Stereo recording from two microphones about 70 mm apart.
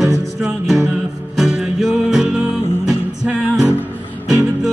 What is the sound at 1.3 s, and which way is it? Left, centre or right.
Music, centre.